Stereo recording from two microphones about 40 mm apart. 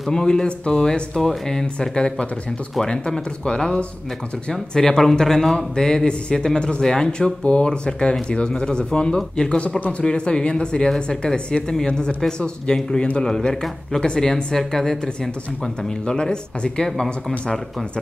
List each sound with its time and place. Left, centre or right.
0.1 s a man's voice: centre
16.1 s speech: left